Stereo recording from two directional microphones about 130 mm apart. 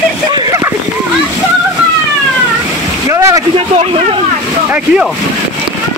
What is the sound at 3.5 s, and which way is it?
Speech, 50° right (ahead or behind).